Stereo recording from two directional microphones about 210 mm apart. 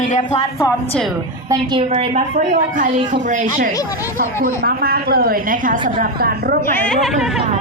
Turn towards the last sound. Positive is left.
turn(degrees=5)  # may be behind; listen again after turning